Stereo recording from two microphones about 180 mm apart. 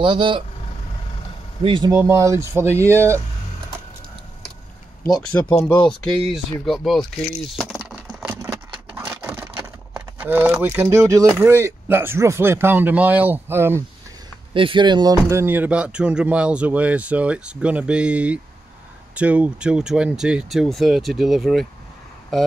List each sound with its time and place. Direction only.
0.0 s speech: 25° right (ahead or behind)
1.6 s speech: 25° right (ahead or behind)
2.0 s speech: 15° right (ahead or behind)
5.3 s speech: 10° left (ahead or behind)
7.5 s a sound: centre (ahead or behind)
11.3 s speech: 15° right (ahead or behind)
14.5 s speech: 30° right (ahead or behind); by 22.5 s centre (ahead or behind)